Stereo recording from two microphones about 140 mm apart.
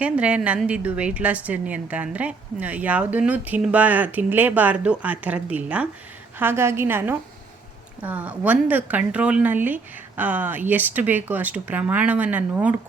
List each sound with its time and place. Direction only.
0.0 s a woman's voice: 10° right (ahead or behind)